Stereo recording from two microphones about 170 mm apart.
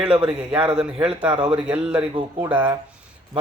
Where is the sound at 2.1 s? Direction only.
30° right (ahead or behind).